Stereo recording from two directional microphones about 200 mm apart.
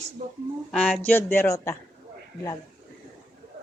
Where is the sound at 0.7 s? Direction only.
5° left (ahead or behind).